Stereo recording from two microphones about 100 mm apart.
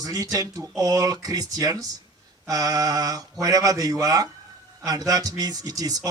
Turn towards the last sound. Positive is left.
turn(degrees=-40)  # may be behind; listen again after turning